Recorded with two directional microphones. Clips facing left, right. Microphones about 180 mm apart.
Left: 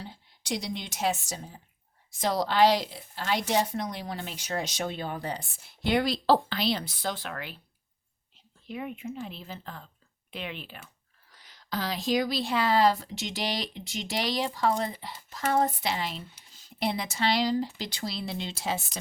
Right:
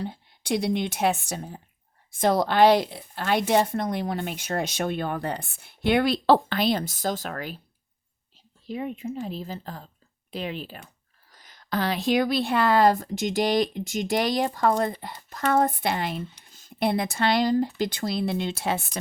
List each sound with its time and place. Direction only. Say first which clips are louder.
0.0 s a woman's voice: right 10 dB; 55° right (ahead or behind)
8.6 s a woman's voice: right 5 dB; 35° right (ahead or behind); by 18.9 s 60° right (ahead or behind)